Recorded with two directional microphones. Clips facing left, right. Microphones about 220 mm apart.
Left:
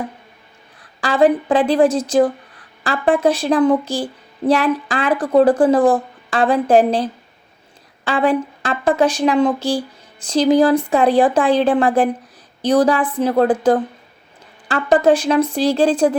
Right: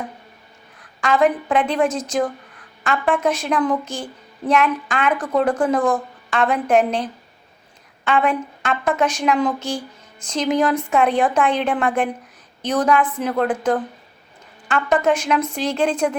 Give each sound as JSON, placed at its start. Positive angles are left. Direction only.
{"t": 0.8, "sound": "a woman's voice", "side_deg": 30}